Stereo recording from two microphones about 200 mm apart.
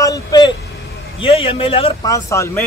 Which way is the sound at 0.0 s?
20° left (ahead or behind).